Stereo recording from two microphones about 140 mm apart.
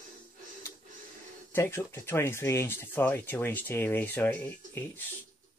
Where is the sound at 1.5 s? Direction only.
15° left (ahead or behind).